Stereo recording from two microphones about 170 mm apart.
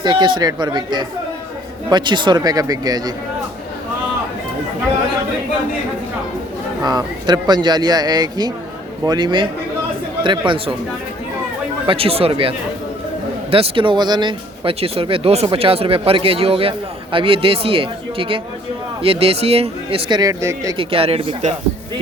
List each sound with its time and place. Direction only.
0.0 s speech: 25° right (ahead or behind)
6.8 s speech: 25° right (ahead or behind)
11.9 s a man's voice: 35° right (ahead or behind); by 20.7 s 20° right (ahead or behind)
20.7 s a man's voice: 35° right (ahead or behind)